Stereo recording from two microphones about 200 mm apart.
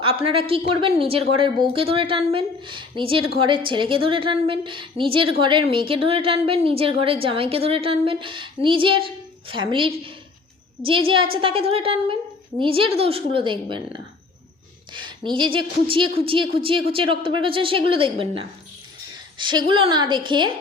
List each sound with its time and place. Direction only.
0.0 s a woman's voice: 30° right (ahead or behind)